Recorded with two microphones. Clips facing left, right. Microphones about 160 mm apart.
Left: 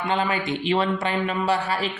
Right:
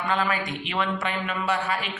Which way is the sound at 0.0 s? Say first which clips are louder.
Left 2 dB; 25° left (ahead or behind).